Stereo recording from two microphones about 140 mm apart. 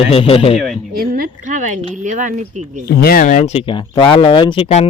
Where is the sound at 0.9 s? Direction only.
90° right; by 2.8 s 60° right (ahead or behind).